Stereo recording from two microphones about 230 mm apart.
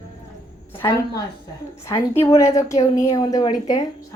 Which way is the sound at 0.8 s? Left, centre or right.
Centre.